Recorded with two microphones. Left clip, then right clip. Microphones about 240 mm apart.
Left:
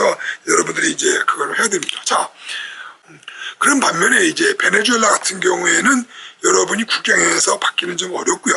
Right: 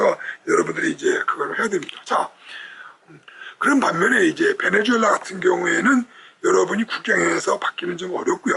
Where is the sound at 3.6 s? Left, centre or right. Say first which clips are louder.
Left 4 dB; centre.